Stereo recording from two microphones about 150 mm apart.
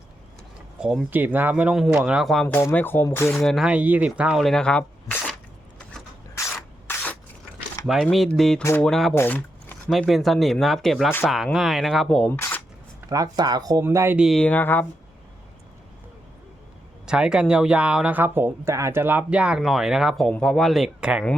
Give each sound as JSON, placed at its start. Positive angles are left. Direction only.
{"t": 0.8, "sound": "speech", "side_deg": -5}
{"t": 2.5, "sound": "speech", "side_deg": 15}
{"t": 3.3, "sound": "speech", "side_deg": 0}
{"t": 6.3, "sound": "rub", "side_deg": 15}
{"t": 7.8, "sound": "a sound", "side_deg": 25}
{"t": 8.1, "sound": "speech", "side_deg": 0}
{"t": 8.9, "sound": "speech", "side_deg": 0}
{"t": 9.1, "sound": "a sound", "side_deg": 15}
{"t": 9.9, "sound": "speech", "side_deg": 0}
{"t": 13.1, "sound": "speech", "side_deg": -25}
{"t": 14.2, "sound": "speech", "side_deg": 0}
{"t": 17.1, "sound": "speech", "side_deg": -5}